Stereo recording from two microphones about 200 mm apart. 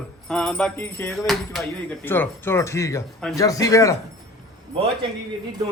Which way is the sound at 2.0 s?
10° left (ahead or behind).